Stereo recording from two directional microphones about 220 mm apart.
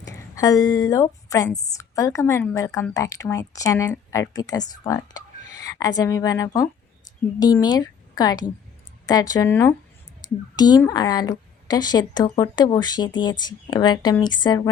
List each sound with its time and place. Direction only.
0.1 s a woman's voice: 15° left (ahead or behind)